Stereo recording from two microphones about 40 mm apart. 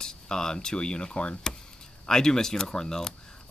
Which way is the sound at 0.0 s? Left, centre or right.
Centre.